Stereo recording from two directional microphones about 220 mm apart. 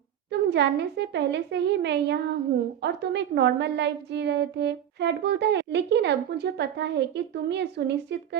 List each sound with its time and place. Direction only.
0.3 s a woman's voice: 50° right (ahead or behind)